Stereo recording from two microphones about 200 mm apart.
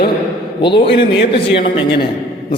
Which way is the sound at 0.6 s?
25° left (ahead or behind).